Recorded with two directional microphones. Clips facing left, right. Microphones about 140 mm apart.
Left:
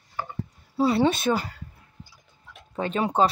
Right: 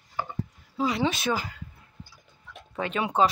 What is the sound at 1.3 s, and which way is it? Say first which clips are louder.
Speech: left 4 dB; 20° left (ahead or behind).